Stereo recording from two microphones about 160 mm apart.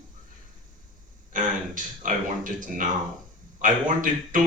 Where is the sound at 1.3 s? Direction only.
55° right (ahead or behind).